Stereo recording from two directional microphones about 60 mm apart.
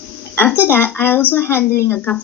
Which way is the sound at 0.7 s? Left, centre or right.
Left.